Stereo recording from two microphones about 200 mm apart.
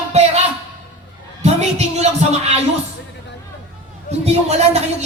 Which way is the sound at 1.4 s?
35° right (ahead or behind).